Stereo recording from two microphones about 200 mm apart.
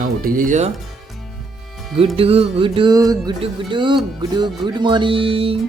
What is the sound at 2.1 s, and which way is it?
Music, 30° right (ahead or behind).